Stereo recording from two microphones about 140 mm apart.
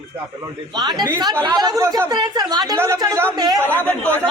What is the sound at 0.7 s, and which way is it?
A woman's voice, 30° right (ahead or behind).